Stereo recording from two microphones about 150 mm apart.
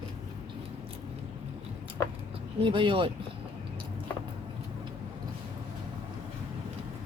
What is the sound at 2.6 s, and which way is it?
Speech, 35° right (ahead or behind).